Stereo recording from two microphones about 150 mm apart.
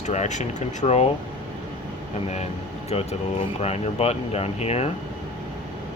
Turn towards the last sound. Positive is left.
turn(degrees=45)  # may be behind; listen again after turning